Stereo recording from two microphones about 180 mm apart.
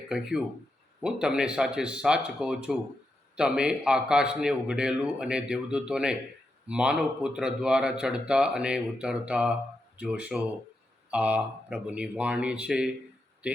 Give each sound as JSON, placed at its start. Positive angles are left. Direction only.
{"t": 0.1, "sound": "speech", "side_deg": -5}